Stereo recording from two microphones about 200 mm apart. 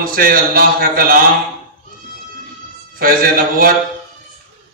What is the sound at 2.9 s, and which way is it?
Speech, 45° right (ahead or behind).